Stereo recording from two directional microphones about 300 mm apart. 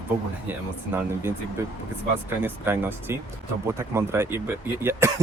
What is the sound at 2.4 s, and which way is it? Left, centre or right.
Speech, centre.